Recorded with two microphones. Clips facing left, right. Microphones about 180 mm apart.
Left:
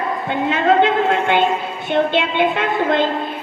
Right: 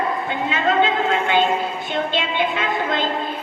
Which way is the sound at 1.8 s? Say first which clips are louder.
Left 11 dB; 60° left (ahead or behind).